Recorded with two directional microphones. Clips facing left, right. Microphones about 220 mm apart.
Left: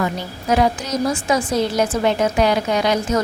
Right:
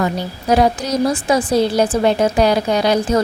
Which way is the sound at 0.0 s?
35° right (ahead or behind).